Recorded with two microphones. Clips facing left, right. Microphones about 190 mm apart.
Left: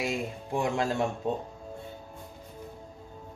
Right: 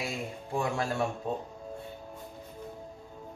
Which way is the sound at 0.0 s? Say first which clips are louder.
Left 4 dB; 20° left (ahead or behind).